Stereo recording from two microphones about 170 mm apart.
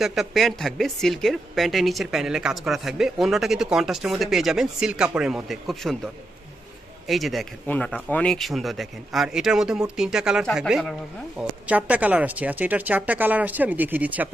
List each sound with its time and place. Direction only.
0.0 s speech: centre (ahead or behind)
7.1 s speech: centre (ahead or behind)